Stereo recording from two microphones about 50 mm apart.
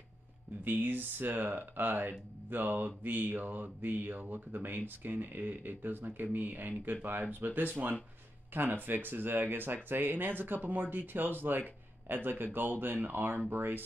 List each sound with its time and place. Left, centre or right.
0.7 s speech: right